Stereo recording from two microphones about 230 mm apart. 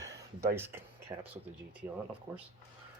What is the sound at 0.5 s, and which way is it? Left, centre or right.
Speech, centre.